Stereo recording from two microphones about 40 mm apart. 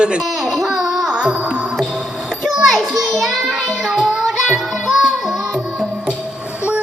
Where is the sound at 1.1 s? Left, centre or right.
Right.